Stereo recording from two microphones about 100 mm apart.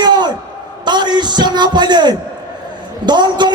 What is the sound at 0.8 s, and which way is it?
Speech, 45° right (ahead or behind).